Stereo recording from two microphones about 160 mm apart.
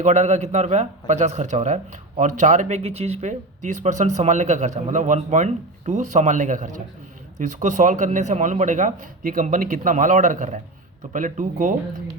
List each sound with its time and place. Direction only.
0.0 s a man's voice: 45° right (ahead or behind)